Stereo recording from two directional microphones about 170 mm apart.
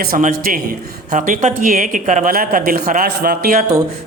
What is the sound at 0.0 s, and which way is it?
Speech, 55° right (ahead or behind).